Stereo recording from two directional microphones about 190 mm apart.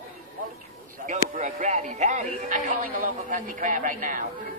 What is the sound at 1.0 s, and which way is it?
Speech, 40° right (ahead or behind).